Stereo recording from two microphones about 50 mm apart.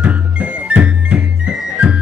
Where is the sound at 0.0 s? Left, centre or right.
Right.